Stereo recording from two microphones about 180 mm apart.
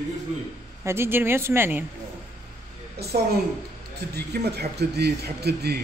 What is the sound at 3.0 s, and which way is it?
Speech, 60° right (ahead or behind).